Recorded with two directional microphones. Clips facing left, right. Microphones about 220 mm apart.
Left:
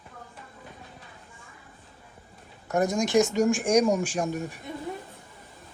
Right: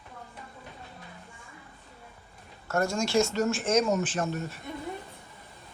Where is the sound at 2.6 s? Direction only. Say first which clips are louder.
Left 3 dB; 15° left (ahead or behind).